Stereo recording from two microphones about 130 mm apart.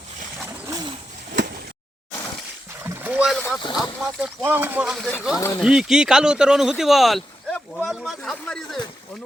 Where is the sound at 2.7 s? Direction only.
20° right (ahead or behind).